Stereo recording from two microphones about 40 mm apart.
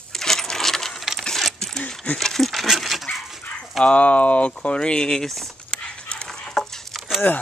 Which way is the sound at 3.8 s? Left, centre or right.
Left.